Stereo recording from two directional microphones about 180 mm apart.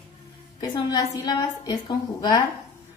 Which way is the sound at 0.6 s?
20° left (ahead or behind).